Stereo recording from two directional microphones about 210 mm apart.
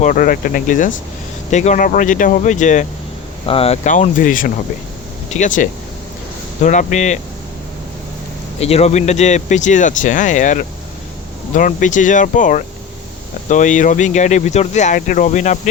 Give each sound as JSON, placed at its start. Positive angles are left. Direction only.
{"t": 0.0, "sound": "speech", "side_deg": 40}
{"t": 8.5, "sound": "speech", "side_deg": 30}